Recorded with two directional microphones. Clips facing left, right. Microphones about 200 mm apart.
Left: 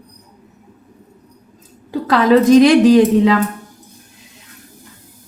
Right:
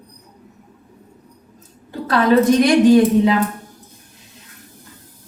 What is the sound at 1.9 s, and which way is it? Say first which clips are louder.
A woman's voice: left 3 dB; 90° left.